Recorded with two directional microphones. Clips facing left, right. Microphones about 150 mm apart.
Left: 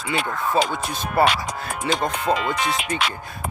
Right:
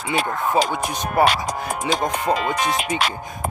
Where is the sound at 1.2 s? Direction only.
15° right (ahead or behind).